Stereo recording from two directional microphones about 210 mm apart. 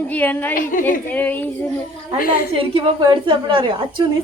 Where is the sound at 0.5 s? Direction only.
40° left (ahead or behind).